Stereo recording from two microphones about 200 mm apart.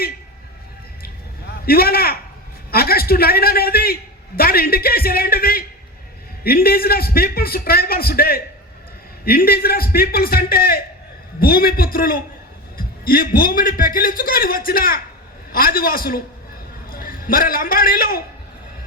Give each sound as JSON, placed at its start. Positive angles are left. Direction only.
{"t": 1.6, "sound": "a man's voice", "side_deg": 50}